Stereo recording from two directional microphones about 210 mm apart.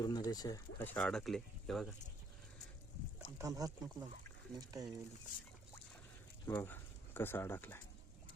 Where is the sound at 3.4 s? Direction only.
15° right (ahead or behind).